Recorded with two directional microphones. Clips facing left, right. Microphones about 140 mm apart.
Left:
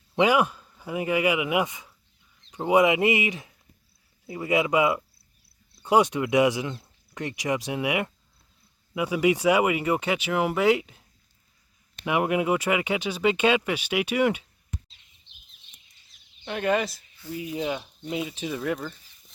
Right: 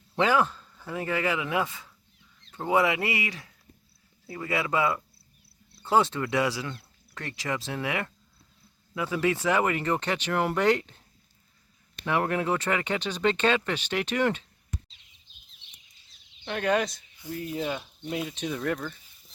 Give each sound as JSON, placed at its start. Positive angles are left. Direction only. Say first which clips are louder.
{"t": 0.2, "sound": "speech", "louder": "left 3 dB", "side_deg": 15}
{"t": 12.0, "sound": "speech", "louder": "left 3 dB", "side_deg": 10}
{"t": 15.3, "sound": "a sound", "louder": "left 2 dB", "side_deg": 75}
{"t": 16.4, "sound": "speech", "louder": "left 1 dB", "side_deg": 0}